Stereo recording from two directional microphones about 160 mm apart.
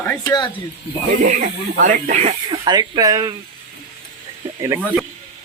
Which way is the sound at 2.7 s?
25° right (ahead or behind).